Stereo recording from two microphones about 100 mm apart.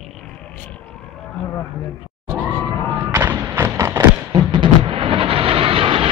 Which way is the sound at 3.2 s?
25° right (ahead or behind).